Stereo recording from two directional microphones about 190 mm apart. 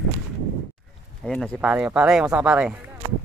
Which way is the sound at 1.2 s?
5° left (ahead or behind).